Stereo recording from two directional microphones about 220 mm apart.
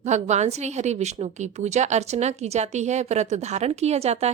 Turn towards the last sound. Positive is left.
turn(degrees=-30)  # may be behind; listen again after turning